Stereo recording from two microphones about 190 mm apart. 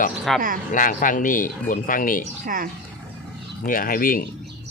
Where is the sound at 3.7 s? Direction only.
45° left (ahead or behind).